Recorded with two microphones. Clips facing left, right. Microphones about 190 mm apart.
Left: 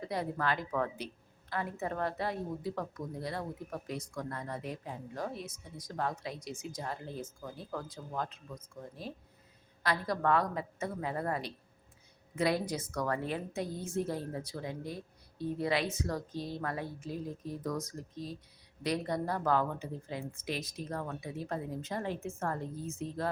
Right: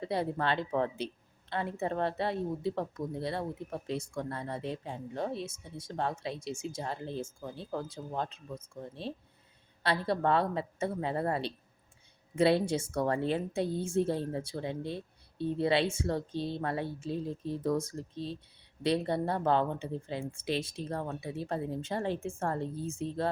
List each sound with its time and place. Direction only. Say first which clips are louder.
0.0 s speech: right 3 dB; 30° right (ahead or behind)